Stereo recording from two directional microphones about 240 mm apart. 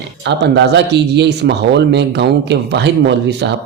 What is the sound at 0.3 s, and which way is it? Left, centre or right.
Speech, right.